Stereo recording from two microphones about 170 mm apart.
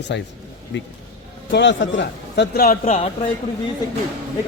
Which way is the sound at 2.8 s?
40° left (ahead or behind).